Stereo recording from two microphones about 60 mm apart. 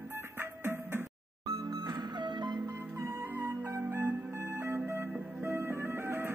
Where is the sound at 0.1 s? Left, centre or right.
Right.